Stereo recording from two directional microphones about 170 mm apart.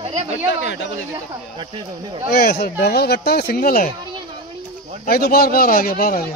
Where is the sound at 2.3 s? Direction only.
65° left (ahead or behind).